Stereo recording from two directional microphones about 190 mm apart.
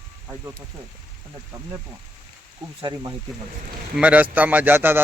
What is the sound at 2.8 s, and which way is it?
Speech, 20° right (ahead or behind).